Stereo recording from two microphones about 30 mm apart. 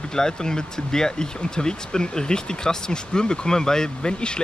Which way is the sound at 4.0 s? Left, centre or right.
Left.